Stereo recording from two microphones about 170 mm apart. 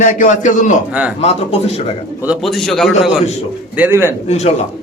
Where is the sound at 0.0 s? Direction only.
50° left (ahead or behind).